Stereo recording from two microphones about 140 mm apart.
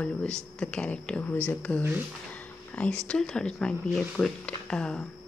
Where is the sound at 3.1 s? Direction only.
5° left (ahead or behind).